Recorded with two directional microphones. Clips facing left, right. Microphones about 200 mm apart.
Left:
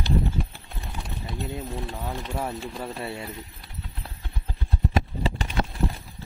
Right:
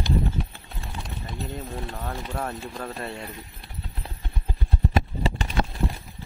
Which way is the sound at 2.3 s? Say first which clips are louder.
Left 1 dB; 5° left (ahead or behind).